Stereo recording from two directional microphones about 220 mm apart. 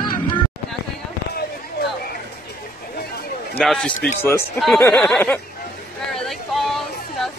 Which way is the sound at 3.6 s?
Centre (ahead or behind).